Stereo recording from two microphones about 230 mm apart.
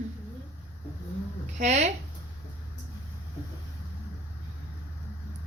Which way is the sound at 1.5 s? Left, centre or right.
Right.